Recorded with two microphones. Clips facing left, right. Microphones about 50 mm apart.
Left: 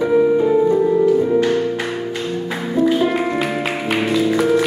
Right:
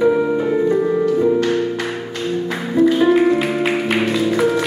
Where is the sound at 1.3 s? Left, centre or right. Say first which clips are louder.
Left 1 dB; centre.